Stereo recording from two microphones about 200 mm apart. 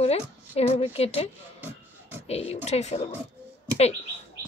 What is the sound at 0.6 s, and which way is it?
Speech, 30° left (ahead or behind).